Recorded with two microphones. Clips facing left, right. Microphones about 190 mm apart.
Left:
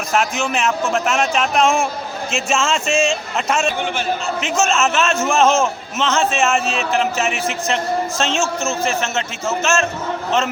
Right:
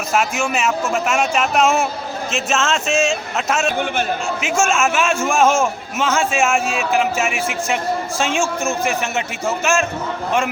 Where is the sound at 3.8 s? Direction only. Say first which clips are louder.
Right 2 dB; 55° right (ahead or behind).